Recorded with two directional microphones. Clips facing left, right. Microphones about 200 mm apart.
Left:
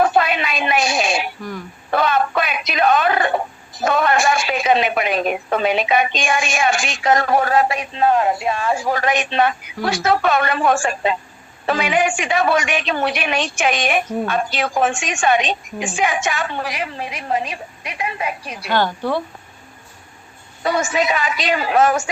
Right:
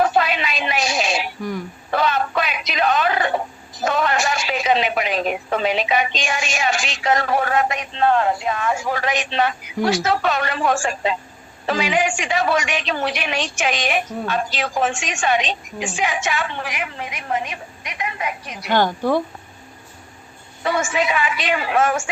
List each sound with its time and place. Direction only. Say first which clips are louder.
0.0 s a sound: left 2 dB; 55° left (ahead or behind)
3.8 s a woman's voice: left 3 dB; 55° left (ahead or behind); by 7.8 s 35° left (ahead or behind)
7.8 s speech: left 1 dB; 15° left (ahead or behind); by 9.0 s 35° left (ahead or behind)
9.0 s a woman's voice: left 3 dB; 50° left (ahead or behind); by 18.5 s 30° left (ahead or behind)
18.6 s a woman's voice: right 1 dB; 15° right (ahead or behind)
20.7 s a woman's voice: left 2 dB; 40° left (ahead or behind)